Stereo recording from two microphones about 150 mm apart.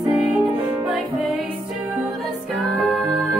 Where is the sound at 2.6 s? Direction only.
Centre (ahead or behind).